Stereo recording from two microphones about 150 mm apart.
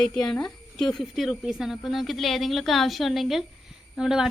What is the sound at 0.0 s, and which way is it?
A woman's voice, 5° left (ahead or behind).